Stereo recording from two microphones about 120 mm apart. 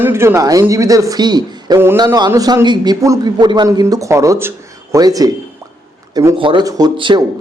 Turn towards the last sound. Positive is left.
turn(degrees=-40)  # may be behind; listen again after turning